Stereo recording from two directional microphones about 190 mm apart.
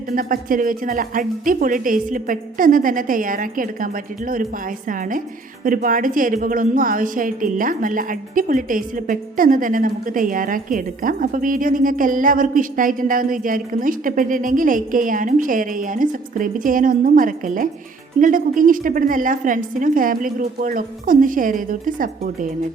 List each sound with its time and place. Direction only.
0.1 s a woman's voice: 45° right (ahead or behind)
4.9 s a woman's voice: 45° right (ahead or behind)